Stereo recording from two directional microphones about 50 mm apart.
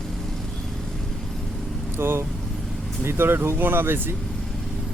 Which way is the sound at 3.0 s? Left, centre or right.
Right.